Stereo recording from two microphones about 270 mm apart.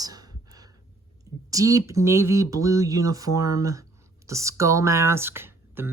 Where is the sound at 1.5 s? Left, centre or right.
Centre.